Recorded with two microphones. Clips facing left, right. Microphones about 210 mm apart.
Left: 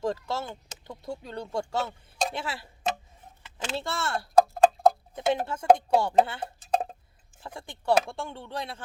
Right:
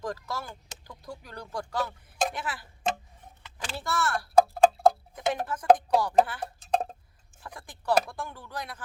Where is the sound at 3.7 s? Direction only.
25° left (ahead or behind).